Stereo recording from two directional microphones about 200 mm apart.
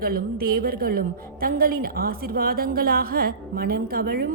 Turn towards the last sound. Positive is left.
turn(degrees=-50)  # may be behind; listen again after turning